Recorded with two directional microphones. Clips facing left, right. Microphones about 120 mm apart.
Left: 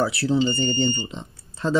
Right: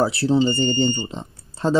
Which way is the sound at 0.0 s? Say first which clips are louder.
Right 3 dB; 30° right (ahead or behind).